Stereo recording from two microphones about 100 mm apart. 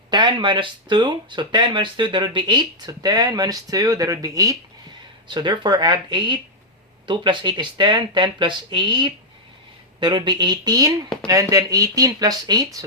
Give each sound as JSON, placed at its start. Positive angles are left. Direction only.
{"t": 0.1, "sound": "speech", "side_deg": -50}
{"t": 5.3, "sound": "speech", "side_deg": -50}